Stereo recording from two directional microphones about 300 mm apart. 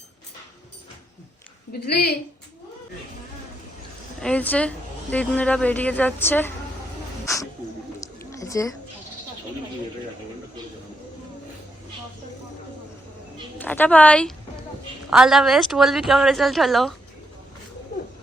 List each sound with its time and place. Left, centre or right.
1.9 s a woman's voice: left
4.2 s a woman's voice: centre
8.0 s a sound: centre
13.6 s a woman's voice: centre